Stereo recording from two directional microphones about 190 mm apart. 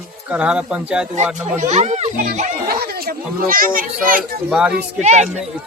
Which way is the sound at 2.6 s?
50° right (ahead or behind).